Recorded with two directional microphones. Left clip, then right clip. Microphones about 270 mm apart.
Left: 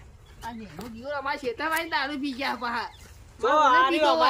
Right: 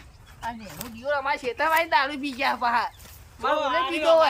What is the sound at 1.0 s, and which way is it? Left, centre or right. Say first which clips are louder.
A woman's voice: right 4 dB; centre.